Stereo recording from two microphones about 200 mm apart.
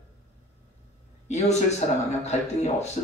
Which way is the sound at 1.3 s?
35° left (ahead or behind).